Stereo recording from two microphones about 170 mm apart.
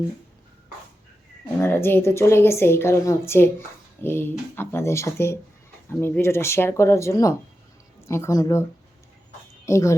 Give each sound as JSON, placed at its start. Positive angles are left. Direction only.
{"t": 1.6, "sound": "a woman's voice", "side_deg": 15}
{"t": 9.6, "sound": "speech", "side_deg": 15}